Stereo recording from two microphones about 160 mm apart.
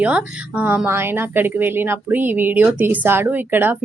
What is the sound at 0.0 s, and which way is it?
A woman's voice, 10° right (ahead or behind).